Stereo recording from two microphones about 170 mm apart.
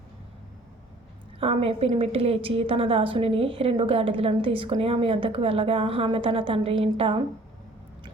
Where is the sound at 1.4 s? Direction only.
35° right (ahead or behind).